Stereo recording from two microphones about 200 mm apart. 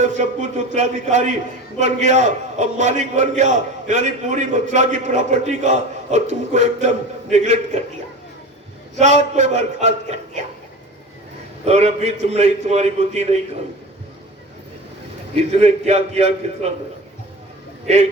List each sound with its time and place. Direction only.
0.1 s a man's voice: 35° right (ahead or behind)
9.0 s a man's voice: 35° right (ahead or behind)
11.6 s a man's voice: 35° right (ahead or behind)
15.4 s a man's voice: 35° right (ahead or behind)